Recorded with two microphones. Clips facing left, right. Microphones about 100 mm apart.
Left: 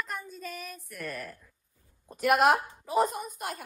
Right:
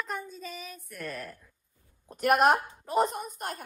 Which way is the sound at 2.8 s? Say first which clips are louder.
Even; centre (ahead or behind).